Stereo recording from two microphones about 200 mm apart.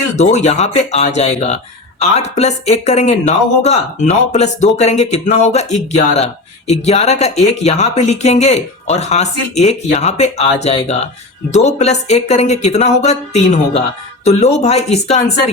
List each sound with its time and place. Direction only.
0.2 s speech: 35° left (ahead or behind)